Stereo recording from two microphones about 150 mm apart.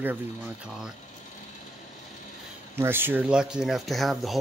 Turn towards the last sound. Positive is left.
turn(degrees=0)  # may be behind; listen again after turning